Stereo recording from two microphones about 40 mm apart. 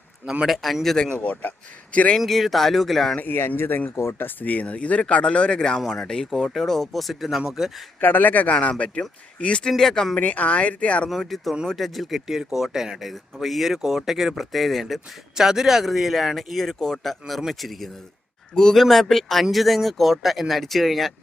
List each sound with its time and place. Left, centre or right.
0.4 s speech: centre
1.1 s a man's voice: left
2.1 s speech: centre
3.2 s speech: left
4.4 s speech: left; by 6.2 s centre
6.3 s speech: centre
8.0 s a man's voice: left
9.0 s speech: left
9.6 s speech: centre
10.2 s speech: left
11.3 s speech: centre
15.4 s speech: centre
18.5 s speech: centre
18.8 s speech: centre